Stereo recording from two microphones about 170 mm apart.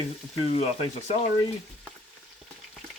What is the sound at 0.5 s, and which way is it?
Speech, 40° left (ahead or behind).